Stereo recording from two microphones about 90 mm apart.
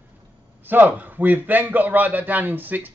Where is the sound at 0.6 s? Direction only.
20° right (ahead or behind).